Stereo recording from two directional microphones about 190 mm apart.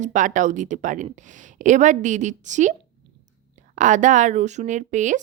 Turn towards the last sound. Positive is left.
turn(degrees=-40)  # may be behind; listen again after turning